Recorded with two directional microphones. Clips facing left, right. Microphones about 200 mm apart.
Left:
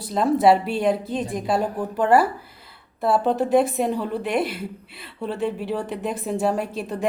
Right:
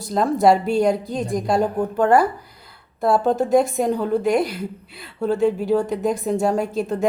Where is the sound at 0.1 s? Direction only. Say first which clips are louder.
Right 1 dB; 5° left (ahead or behind).